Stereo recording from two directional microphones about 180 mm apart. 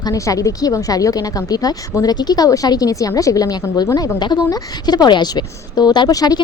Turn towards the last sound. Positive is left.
turn(degrees=20)  # may be behind; listen again after turning